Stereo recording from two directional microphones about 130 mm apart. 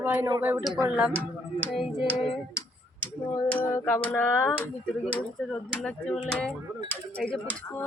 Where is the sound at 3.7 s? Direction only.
15° left (ahead or behind).